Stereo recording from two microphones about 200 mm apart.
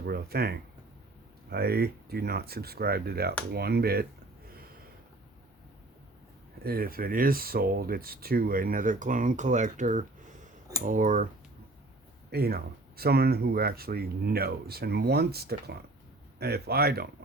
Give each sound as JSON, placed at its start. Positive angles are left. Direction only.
{"t": 0.0, "sound": "speech", "side_deg": -50}
{"t": 6.6, "sound": "speech", "side_deg": -50}
{"t": 12.3, "sound": "speech", "side_deg": -50}